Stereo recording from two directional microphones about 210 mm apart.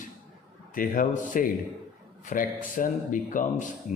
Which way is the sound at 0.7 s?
40° left (ahead or behind).